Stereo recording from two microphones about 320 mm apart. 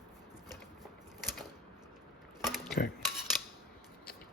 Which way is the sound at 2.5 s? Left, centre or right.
Centre.